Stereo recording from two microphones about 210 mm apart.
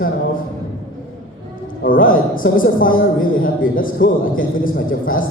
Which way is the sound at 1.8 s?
40° left (ahead or behind).